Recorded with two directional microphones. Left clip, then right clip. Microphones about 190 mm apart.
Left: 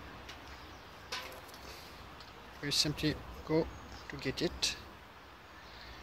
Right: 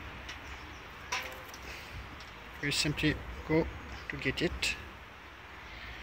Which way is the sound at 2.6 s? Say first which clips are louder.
Right 2 dB; 5° left (ahead or behind).